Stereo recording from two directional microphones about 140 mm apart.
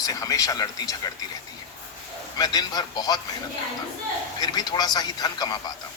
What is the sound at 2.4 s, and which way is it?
Speech, 30° left (ahead or behind).